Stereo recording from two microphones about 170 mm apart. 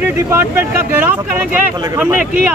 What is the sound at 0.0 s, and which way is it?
A man's voice, 10° right (ahead or behind).